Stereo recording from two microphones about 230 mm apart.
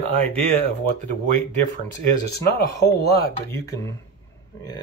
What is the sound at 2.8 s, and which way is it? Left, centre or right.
Speech, left.